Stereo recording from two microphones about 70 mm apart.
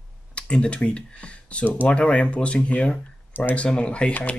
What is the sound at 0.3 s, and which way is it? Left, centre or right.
Speech, centre.